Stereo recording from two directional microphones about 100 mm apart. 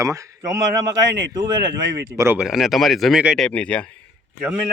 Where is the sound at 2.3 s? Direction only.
5° right (ahead or behind).